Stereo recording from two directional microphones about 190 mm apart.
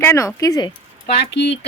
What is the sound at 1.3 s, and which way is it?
Speech, 65° left (ahead or behind).